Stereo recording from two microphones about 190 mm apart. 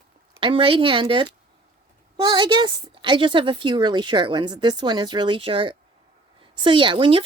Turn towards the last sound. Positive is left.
turn(degrees=-25)  # may be behind; listen again after turning